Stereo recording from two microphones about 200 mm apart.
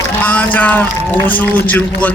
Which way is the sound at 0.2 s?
10° left (ahead or behind).